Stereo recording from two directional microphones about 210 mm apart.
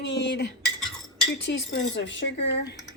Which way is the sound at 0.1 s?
55° left (ahead or behind).